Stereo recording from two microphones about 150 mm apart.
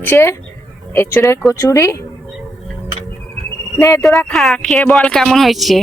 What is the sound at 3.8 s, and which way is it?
Speech, 20° left (ahead or behind).